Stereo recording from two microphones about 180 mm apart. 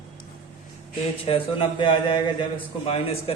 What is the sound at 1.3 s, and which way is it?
A man's voice, 30° left (ahead or behind).